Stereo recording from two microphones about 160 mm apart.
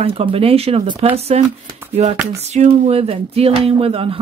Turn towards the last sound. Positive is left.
turn(degrees=-35)  # may be behind; listen again after turning